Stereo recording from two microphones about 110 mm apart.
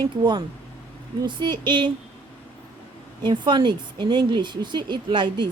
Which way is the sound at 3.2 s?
45° right (ahead or behind).